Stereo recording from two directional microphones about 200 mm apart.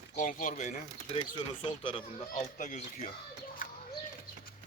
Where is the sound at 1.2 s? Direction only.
25° left (ahead or behind).